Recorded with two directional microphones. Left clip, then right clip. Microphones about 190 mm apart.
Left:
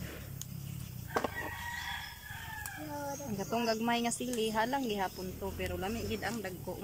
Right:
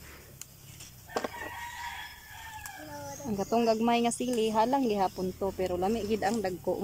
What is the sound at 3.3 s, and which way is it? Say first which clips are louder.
Speech: right 8 dB; 20° right (ahead or behind).